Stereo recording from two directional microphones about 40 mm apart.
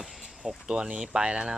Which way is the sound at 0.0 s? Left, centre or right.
Centre.